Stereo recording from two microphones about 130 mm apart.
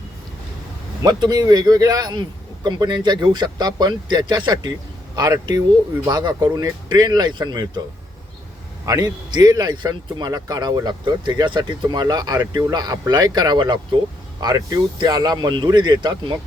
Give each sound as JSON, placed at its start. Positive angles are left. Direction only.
{"t": 1.0, "sound": "speech", "side_deg": -30}
{"t": 8.9, "sound": "speech", "side_deg": -30}